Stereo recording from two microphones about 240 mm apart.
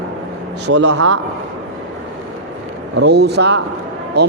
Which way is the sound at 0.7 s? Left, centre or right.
Right.